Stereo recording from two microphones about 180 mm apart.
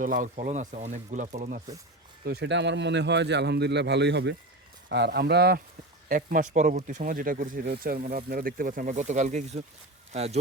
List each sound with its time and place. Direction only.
0.0 s speech: 45° right (ahead or behind)
2.2 s speech: 70° right (ahead or behind)
6.1 s speech: 50° right (ahead or behind)